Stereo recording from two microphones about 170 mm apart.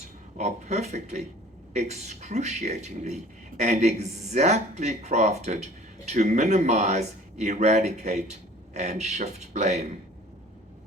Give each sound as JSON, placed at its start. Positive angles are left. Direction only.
{"t": 0.3, "sound": "speech", "side_deg": -40}